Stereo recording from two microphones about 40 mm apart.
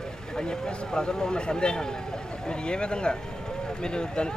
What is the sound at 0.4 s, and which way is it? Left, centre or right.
Speech, centre.